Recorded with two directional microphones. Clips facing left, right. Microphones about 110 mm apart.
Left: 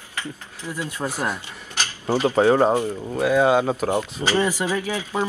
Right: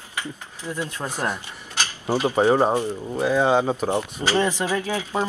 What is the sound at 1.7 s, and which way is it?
Speech, 15° right (ahead or behind).